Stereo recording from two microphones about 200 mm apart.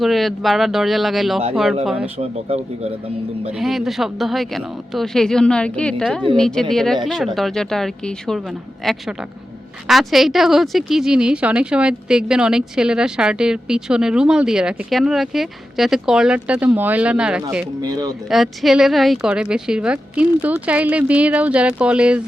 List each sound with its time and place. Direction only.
0.0 s a woman's voice: centre (ahead or behind)
2.1 s a man's voice: 30° right (ahead or behind)
3.6 s a woman's voice: centre (ahead or behind)